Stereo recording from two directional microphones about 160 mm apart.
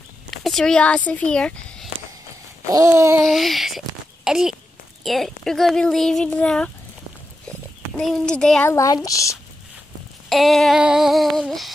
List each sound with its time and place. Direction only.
0.3 s speech: centre (ahead or behind)
2.7 s a sound: 20° right (ahead or behind)
3.3 s speech: centre (ahead or behind)
8.0 s speech: 5° left (ahead or behind)
8.6 s speech: 20° left (ahead or behind)
10.3 s speech: centre (ahead or behind)